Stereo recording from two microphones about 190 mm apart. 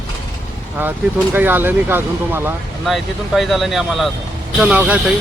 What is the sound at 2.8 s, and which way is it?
Speech, centre (ahead or behind).